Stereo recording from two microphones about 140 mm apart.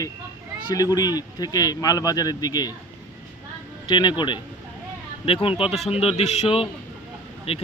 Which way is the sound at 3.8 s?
35° left (ahead or behind).